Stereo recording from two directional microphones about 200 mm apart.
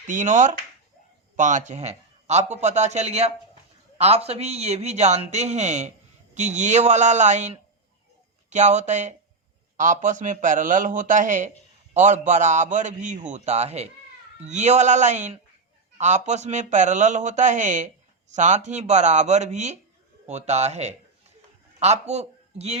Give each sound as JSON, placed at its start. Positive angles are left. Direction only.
{"t": 0.1, "sound": "a man's voice", "side_deg": -40}